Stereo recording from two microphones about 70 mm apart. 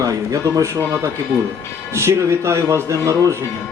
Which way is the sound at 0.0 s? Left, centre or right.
Right.